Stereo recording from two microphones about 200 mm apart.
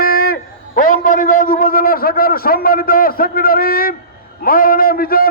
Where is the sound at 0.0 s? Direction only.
45° left (ahead or behind).